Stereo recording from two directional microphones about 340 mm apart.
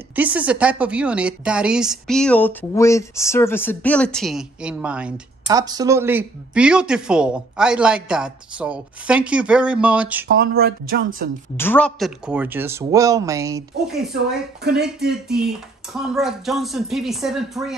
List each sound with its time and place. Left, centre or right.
0.1 s a woman's voice: centre
10.2 s speech: right
11.5 s a woman's voice: centre